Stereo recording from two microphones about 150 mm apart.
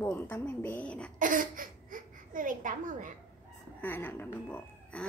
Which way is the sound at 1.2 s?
65° right (ahead or behind).